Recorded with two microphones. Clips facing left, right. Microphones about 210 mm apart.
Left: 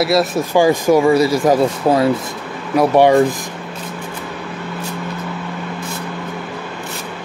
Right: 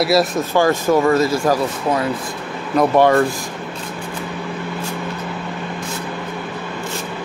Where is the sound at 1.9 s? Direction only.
35° left (ahead or behind).